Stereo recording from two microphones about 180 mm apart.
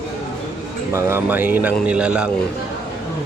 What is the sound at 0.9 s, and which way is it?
Speech, 10° right (ahead or behind).